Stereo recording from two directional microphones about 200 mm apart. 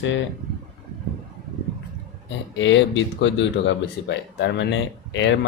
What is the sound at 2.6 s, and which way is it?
Speech, 70° left (ahead or behind).